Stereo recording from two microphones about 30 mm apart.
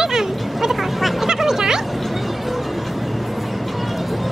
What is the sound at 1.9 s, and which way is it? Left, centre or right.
Music, centre.